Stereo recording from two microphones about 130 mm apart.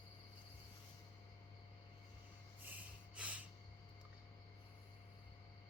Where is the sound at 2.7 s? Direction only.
10° right (ahead or behind).